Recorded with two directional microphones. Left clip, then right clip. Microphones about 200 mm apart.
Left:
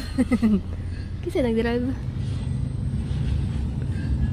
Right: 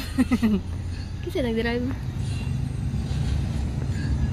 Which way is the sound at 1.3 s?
50° left (ahead or behind).